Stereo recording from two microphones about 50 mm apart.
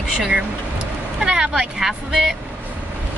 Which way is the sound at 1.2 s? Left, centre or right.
Centre.